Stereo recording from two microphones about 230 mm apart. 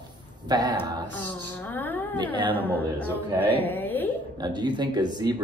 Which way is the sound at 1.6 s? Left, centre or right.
Centre.